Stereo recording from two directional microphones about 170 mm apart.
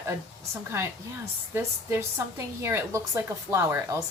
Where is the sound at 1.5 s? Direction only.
15° right (ahead or behind).